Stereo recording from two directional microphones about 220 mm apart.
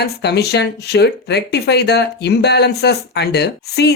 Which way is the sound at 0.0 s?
50° left (ahead or behind).